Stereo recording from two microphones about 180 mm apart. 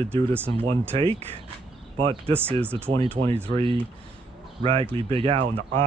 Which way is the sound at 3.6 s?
30° right (ahead or behind).